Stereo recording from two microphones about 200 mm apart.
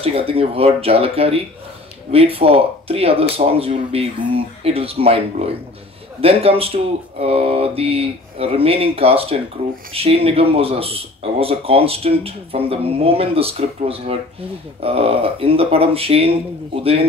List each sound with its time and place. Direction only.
0.0 s speech: 30° right (ahead or behind)